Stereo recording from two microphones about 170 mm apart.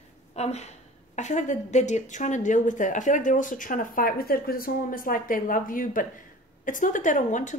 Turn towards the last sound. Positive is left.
turn(degrees=45)  # may be behind; listen again after turning